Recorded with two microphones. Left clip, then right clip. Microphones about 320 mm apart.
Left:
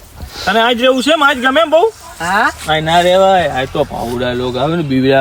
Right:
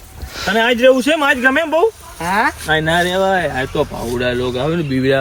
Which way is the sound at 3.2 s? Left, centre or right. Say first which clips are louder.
Left 6 dB; left.